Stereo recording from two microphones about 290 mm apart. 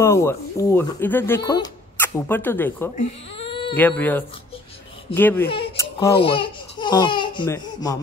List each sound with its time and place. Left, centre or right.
0.0 s speech: centre
3.0 s baby cry: centre
3.7 s speech: centre